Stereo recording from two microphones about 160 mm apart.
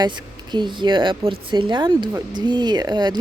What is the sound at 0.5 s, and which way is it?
Speech, 30° right (ahead or behind).